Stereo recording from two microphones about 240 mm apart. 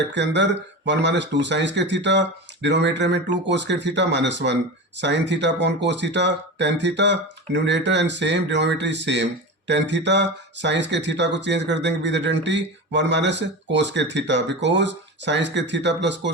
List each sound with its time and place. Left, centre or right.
0.1 s speech: right